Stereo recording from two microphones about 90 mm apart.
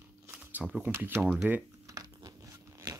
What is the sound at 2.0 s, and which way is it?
Crunch, 40° right (ahead or behind).